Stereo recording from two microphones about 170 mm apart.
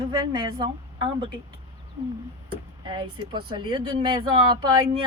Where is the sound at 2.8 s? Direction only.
30° right (ahead or behind).